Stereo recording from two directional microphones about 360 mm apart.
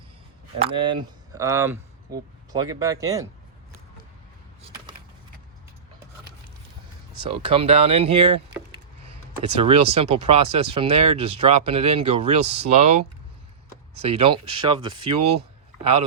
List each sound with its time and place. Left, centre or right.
0.6 s speech: centre
7.2 s speech: centre
9.4 s speech: centre
14.0 s speech: centre